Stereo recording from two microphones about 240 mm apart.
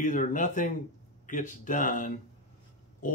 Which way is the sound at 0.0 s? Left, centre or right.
Left.